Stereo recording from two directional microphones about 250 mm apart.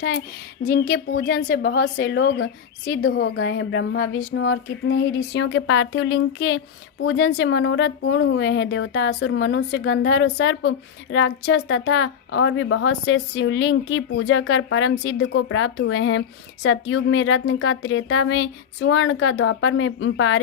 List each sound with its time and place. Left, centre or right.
0.7 s a woman's voice: left